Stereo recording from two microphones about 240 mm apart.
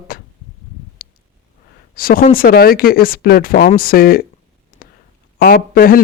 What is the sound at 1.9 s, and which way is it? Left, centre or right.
Speech, left.